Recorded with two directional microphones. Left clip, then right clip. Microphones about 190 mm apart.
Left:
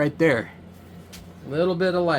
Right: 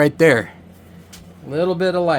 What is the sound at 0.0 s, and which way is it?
Speech, 65° right (ahead or behind).